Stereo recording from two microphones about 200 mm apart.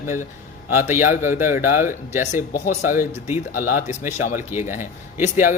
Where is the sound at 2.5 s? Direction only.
40° left (ahead or behind).